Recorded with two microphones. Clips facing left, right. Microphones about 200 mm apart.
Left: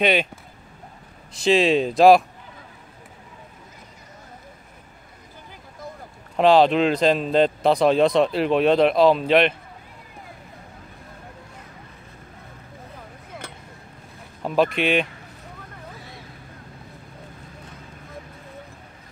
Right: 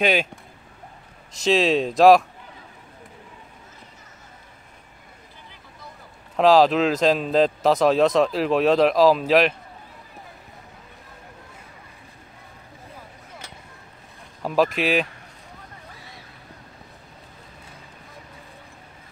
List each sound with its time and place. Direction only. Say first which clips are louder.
0.0 s speech: left 1 dB; centre (ahead or behind)
1.4 s speech: left 1 dB; centre (ahead or behind)
6.3 s speech: even; centre (ahead or behind)
13.3 s a sound: left 6 dB; 55° left (ahead or behind)
14.4 s speech: even; centre (ahead or behind)